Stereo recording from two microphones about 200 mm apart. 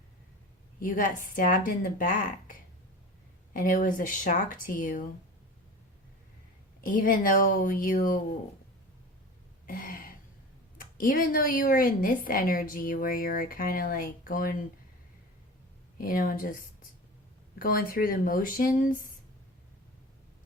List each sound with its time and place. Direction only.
0.8 s speech: 40° left (ahead or behind)
6.8 s speech: 45° left (ahead or behind)
9.6 s throat clearing: 45° left (ahead or behind)
10.8 s a woman's voice: 45° left (ahead or behind)
16.0 s a woman's voice: 45° left (ahead or behind)